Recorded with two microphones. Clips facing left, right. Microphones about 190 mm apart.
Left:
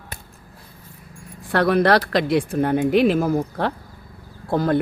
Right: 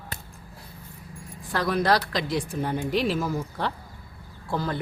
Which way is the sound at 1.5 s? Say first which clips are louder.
Left 7 dB; 60° left (ahead or behind).